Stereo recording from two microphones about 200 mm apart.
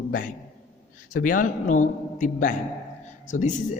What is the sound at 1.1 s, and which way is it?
A man's voice, 40° left (ahead or behind).